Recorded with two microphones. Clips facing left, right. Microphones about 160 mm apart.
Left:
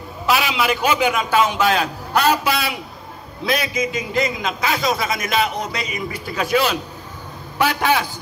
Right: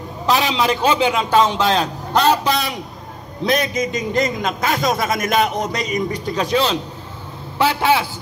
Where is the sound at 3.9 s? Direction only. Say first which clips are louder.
Right 2 dB; 45° right (ahead or behind).